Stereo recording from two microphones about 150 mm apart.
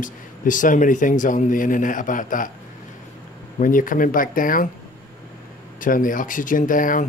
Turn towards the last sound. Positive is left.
turn(degrees=65)  # may be behind; listen again after turning